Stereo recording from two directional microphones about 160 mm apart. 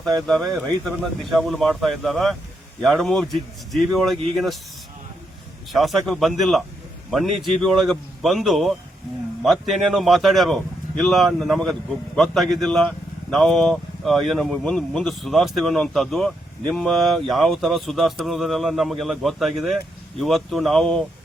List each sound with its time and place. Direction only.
0.3 s speech: centre (ahead or behind)
5.7 s speech: centre (ahead or behind)